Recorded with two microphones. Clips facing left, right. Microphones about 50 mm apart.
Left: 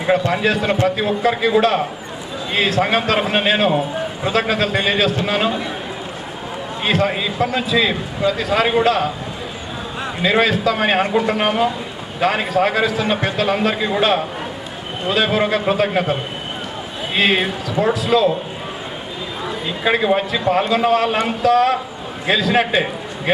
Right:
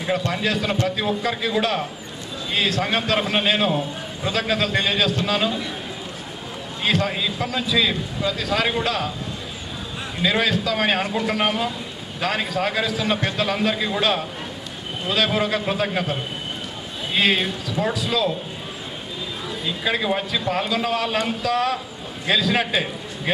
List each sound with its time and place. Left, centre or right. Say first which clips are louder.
0.0 s a man's voice: left 6 dB; left
6.8 s a man's voice: left 4 dB; left
17.2 s a man's voice: left 3 dB; left
19.5 s a man's voice: left 6 dB; left